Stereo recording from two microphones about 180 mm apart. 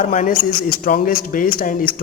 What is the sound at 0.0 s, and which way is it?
A man's voice, 45° left (ahead or behind).